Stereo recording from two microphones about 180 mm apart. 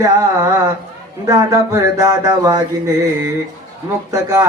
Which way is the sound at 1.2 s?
15° right (ahead or behind).